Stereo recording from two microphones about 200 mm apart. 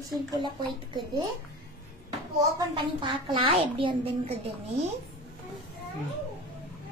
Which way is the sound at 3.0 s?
25° right (ahead or behind).